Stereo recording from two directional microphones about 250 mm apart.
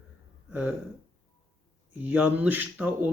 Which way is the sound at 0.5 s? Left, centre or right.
Centre.